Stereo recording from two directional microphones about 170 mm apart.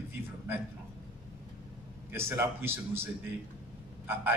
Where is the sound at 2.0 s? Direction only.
15° right (ahead or behind).